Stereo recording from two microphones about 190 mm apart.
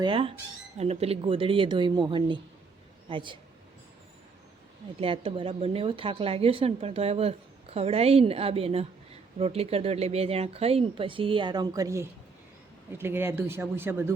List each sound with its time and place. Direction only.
0.0 s speech: 30° right (ahead or behind)
4.9 s a woman's voice: 30° right (ahead or behind); by 14.1 s 10° right (ahead or behind)